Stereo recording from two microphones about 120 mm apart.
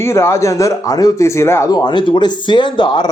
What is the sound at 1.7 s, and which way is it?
Speech, 40° left (ahead or behind).